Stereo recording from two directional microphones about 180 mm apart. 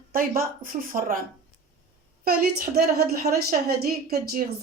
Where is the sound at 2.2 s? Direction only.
55° right (ahead or behind).